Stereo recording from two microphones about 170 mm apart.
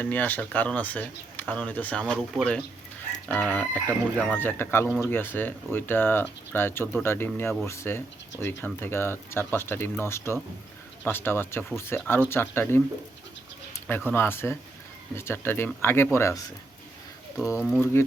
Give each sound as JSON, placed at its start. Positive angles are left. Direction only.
{"t": 0.0, "sound": "speech", "side_deg": 10}
{"t": 13.8, "sound": "speech", "side_deg": 10}
{"t": 17.7, "sound": "speech", "side_deg": 10}